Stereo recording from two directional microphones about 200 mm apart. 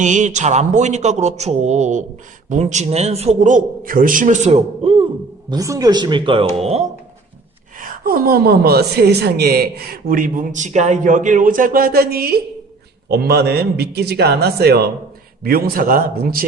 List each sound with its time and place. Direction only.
0.0 s a man's voice: 35° right (ahead or behind)
5.5 s speech: 15° right (ahead or behind); by 6.8 s 30° right (ahead or behind)
7.8 s a woman's voice: 45° right (ahead or behind)